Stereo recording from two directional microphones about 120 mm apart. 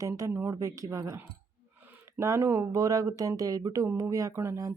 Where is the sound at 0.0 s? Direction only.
25° right (ahead or behind).